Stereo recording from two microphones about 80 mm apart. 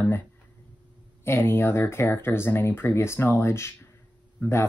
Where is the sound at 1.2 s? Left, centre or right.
Left.